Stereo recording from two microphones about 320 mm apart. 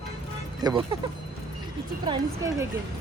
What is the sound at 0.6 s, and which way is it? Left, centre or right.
Speech, centre.